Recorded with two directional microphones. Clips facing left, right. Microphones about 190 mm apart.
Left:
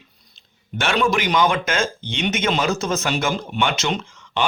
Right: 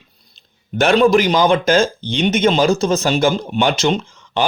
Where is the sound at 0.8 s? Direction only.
35° right (ahead or behind).